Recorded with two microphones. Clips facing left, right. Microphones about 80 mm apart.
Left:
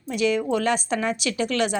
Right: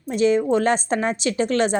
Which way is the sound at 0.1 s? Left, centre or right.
Right.